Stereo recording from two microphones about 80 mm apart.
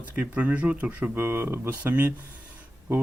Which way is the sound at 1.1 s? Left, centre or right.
Right.